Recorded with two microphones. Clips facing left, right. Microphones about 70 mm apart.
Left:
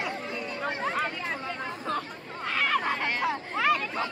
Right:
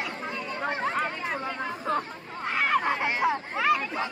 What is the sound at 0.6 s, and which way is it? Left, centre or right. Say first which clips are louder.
Chatter: right 2 dB; centre.